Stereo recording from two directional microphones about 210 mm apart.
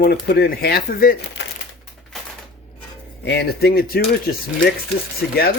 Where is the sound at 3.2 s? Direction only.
55° left (ahead or behind).